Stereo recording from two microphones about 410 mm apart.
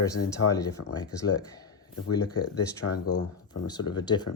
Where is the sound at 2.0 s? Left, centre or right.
Left.